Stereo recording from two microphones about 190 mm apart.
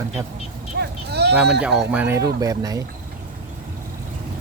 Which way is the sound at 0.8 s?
60° right (ahead or behind).